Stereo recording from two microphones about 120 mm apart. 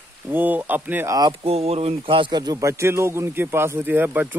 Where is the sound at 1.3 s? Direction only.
55° right (ahead or behind); by 4.3 s 15° right (ahead or behind).